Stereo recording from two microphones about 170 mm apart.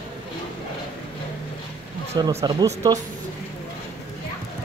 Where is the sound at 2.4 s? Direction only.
25° right (ahead or behind).